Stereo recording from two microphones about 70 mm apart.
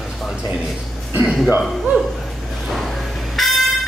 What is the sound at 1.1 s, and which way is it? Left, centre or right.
Speech, centre.